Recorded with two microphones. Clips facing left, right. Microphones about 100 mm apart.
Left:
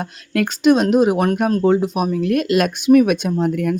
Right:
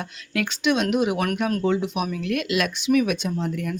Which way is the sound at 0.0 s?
45° left (ahead or behind).